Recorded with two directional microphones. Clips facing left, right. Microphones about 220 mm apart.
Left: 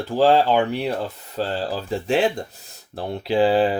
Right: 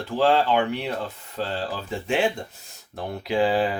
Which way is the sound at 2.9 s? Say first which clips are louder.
Left 4 dB; 30° left (ahead or behind).